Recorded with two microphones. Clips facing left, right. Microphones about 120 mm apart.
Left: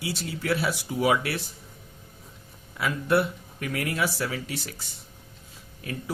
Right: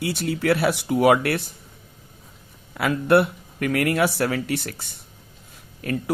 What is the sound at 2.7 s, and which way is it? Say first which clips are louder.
Speech: right 6 dB; 65° right (ahead or behind).